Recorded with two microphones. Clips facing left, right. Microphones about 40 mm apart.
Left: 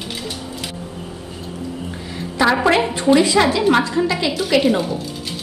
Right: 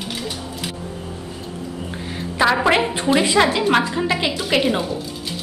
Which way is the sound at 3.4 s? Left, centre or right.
Centre.